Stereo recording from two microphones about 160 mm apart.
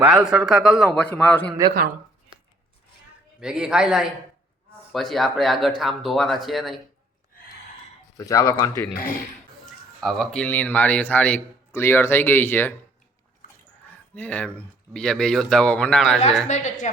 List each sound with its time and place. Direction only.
0.0 s a man's voice: 5° right (ahead or behind)
3.4 s speech: 5° right (ahead or behind)
8.2 s speech: 20° left (ahead or behind)
9.6 s a man's voice: centre (ahead or behind)
13.8 s speech: 10° left (ahead or behind)
16.5 s a woman's voice: 50° left (ahead or behind)